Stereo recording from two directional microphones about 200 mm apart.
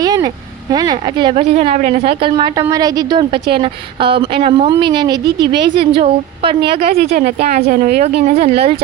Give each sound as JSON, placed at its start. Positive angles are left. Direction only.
{"t": 0.0, "sound": "a sound", "side_deg": -20}
{"t": 0.7, "sound": "a woman's voice", "side_deg": -20}
{"t": 7.1, "sound": "speech", "side_deg": -35}